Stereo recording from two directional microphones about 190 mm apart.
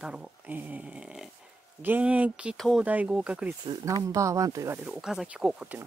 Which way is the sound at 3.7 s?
20° right (ahead or behind).